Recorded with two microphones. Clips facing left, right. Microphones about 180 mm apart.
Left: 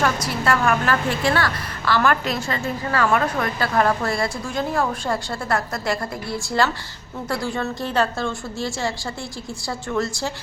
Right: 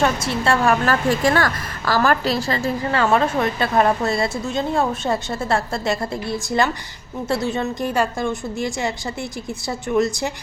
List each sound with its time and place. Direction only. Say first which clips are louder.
0.0 s a woman's voice: right 2 dB; 25° right (ahead or behind)
0.9 s a woman's voice: right 3 dB; 45° right (ahead or behind); by 10.3 s 20° right (ahead or behind)